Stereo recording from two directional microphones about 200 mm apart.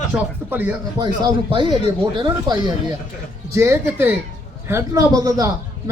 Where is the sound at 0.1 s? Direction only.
10° right (ahead or behind).